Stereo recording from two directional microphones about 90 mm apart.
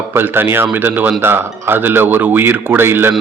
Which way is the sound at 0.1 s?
25° right (ahead or behind).